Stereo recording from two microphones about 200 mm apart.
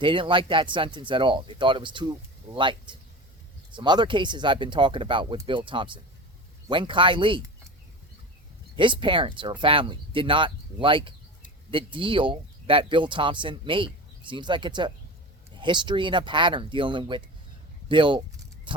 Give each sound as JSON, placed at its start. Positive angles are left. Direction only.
{"t": 0.0, "sound": "speech", "side_deg": -25}
{"t": 8.7, "sound": "speech", "side_deg": -25}